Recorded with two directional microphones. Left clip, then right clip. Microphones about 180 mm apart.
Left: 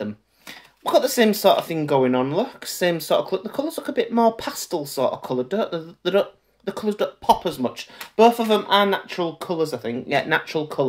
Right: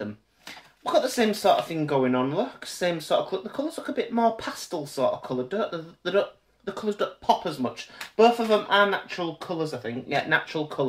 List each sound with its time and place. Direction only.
0.8 s speech: 45° left (ahead or behind)